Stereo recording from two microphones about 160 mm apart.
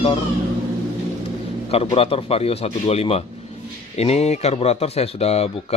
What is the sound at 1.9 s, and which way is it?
Speech, 35° left (ahead or behind).